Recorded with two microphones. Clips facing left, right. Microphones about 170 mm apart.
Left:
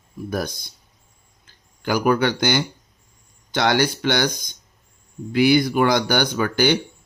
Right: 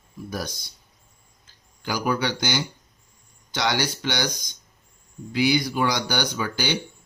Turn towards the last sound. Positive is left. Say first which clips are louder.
# left 7 dB
turn(degrees=55)  # may be behind; listen again after turning